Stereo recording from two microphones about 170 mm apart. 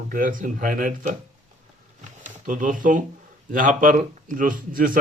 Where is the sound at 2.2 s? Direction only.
50° right (ahead or behind).